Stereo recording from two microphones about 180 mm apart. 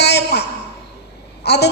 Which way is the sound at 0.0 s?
65° left (ahead or behind).